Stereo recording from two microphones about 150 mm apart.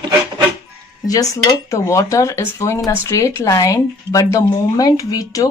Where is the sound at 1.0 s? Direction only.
25° left (ahead or behind).